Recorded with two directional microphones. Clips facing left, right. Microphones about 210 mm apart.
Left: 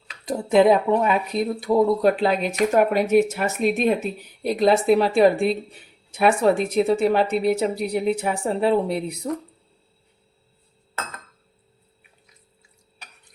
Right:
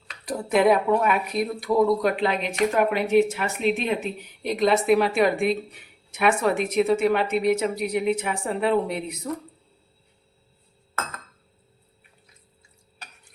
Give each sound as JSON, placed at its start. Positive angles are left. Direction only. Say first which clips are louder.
{"t": 0.3, "sound": "speech", "louder": "left 3 dB", "side_deg": 25}